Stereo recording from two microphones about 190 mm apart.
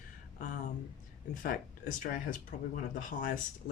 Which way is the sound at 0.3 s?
45° left (ahead or behind).